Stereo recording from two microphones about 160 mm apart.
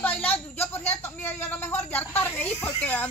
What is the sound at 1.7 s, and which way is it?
Snake, 10° left (ahead or behind).